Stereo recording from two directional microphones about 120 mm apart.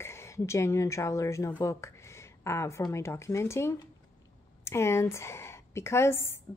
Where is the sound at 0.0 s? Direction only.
20° left (ahead or behind).